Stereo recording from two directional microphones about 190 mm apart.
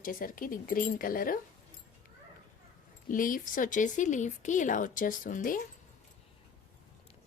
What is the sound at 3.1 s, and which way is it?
Speech, 45° left (ahead or behind).